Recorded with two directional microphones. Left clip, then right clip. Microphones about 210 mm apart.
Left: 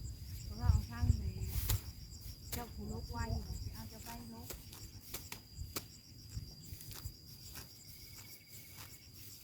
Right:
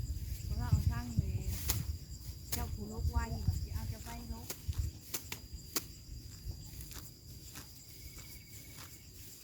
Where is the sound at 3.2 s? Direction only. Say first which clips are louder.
Right 2 dB; 30° right (ahead or behind).